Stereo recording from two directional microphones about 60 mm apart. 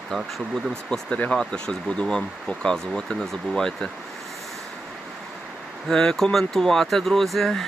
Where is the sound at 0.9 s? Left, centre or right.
Centre.